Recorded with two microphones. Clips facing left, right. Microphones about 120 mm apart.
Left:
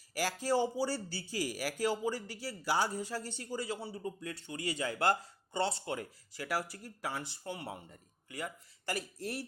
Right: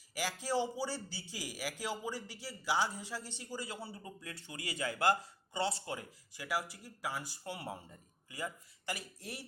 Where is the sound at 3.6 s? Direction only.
25° left (ahead or behind).